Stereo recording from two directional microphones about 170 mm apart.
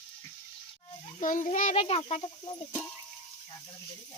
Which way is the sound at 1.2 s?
50° left (ahead or behind).